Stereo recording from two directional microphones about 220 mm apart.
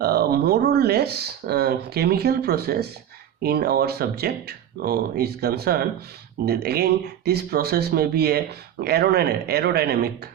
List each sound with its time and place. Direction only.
0.0 s speech: 45° right (ahead or behind)